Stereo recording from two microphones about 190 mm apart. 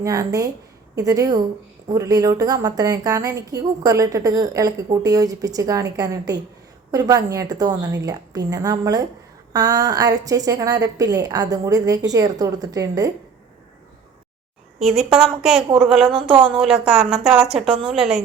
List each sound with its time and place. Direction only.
0.0 s a woman's voice: 20° right (ahead or behind)
14.8 s a woman's voice: 5° right (ahead or behind)